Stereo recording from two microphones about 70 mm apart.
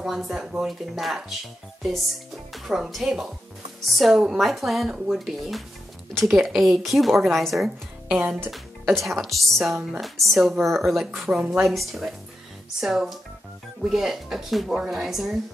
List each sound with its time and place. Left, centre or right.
0.0 s speech: centre
2.5 s speech: centre